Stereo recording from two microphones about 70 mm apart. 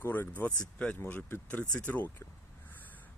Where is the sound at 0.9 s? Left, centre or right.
Left.